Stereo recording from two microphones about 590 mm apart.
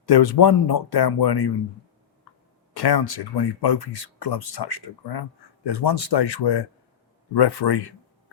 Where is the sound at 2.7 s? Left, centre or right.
Left.